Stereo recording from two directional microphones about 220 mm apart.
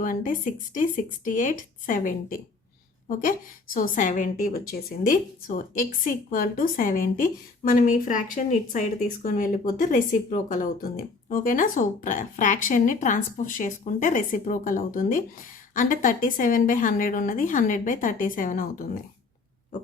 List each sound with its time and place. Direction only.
0.0 s a woman's voice: 35° left (ahead or behind)